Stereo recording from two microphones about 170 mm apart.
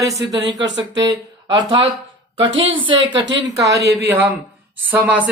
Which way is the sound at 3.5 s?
20° right (ahead or behind).